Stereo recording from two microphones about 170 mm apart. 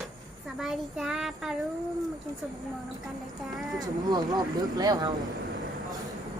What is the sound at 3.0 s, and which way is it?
Speech, centre (ahead or behind).